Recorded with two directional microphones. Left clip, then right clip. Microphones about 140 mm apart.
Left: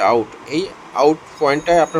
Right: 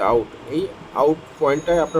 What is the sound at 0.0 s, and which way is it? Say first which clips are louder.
Speech: left 3 dB; 40° left (ahead or behind).